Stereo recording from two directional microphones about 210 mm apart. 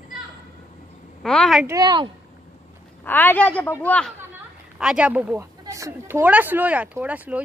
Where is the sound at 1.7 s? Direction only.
20° right (ahead or behind).